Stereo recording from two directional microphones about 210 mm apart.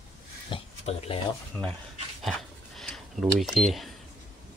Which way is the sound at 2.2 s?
Centre (ahead or behind).